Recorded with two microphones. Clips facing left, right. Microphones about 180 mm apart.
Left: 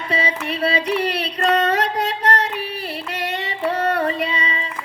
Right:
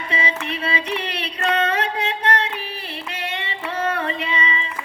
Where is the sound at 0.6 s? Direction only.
35° left (ahead or behind).